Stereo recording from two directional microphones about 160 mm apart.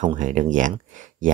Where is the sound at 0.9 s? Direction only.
55° right (ahead or behind).